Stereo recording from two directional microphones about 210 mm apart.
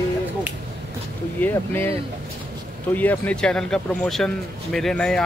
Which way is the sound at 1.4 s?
10° left (ahead or behind).